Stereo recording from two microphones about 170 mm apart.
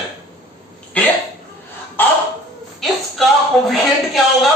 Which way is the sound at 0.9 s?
10° left (ahead or behind).